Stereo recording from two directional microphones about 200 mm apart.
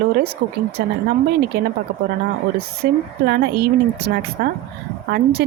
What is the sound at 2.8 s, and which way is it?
Speech, 50° right (ahead or behind).